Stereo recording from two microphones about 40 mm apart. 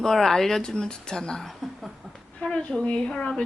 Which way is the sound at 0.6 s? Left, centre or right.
Centre.